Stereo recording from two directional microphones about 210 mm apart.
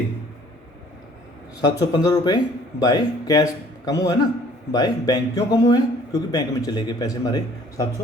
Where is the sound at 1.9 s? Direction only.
20° left (ahead or behind).